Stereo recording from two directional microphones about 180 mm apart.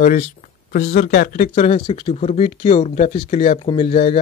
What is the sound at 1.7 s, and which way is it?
Speech, 25° left (ahead or behind).